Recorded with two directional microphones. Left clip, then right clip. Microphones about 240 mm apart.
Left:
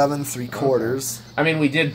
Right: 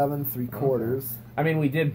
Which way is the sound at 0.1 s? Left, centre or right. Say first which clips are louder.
Left 5 dB; left.